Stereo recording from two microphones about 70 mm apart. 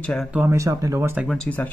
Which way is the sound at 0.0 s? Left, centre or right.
Centre.